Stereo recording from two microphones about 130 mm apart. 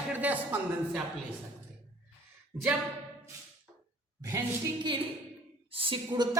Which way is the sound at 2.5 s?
20° right (ahead or behind).